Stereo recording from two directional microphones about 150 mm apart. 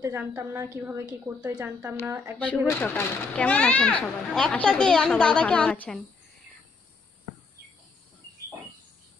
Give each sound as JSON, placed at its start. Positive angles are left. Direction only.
{"t": 0.0, "sound": "a woman's voice", "side_deg": -15}
{"t": 2.3, "sound": "a child's voice", "side_deg": 10}